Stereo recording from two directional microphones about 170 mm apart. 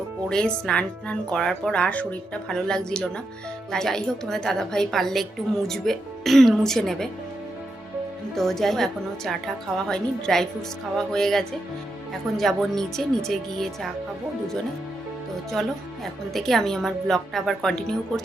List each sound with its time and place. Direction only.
0.3 s speech: 5° left (ahead or behind)
8.4 s speech: centre (ahead or behind)
16.3 s speech: centre (ahead or behind)